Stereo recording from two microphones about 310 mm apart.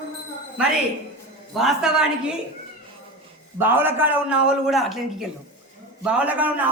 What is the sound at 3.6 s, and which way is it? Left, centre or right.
A man's voice, centre.